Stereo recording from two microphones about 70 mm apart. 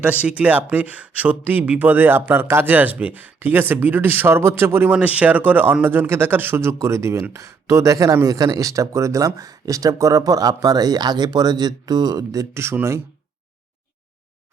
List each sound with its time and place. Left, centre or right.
0.0 s speech: centre; by 4.9 s right
4.9 s speech: centre; by 12.5 s right